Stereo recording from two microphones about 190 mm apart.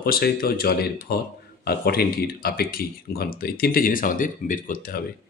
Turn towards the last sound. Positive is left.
turn(degrees=45)  # may be behind; listen again after turning